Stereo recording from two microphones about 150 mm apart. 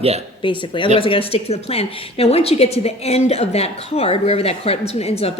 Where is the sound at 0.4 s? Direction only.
35° left (ahead or behind).